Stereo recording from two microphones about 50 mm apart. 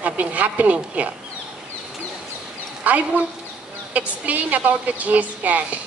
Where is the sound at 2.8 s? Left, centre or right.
Right.